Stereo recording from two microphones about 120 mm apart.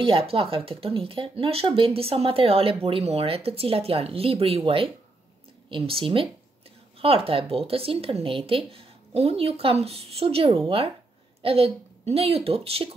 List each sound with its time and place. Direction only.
0.0 s speech: 50° right (ahead or behind)